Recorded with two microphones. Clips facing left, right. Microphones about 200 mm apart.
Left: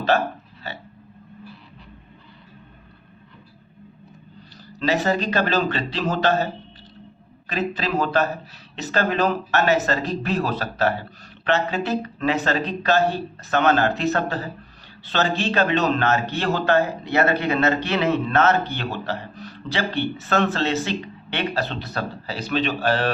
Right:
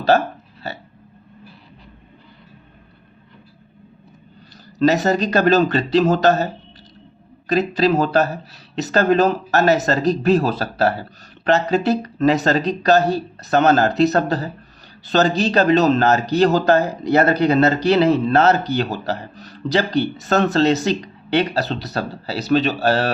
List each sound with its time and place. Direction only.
4.8 s speech: 40° right (ahead or behind)